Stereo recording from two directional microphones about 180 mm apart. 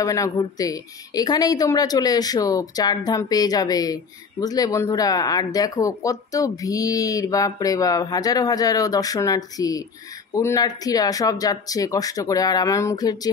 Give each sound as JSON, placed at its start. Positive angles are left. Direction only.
{"t": 0.0, "sound": "speech", "side_deg": 20}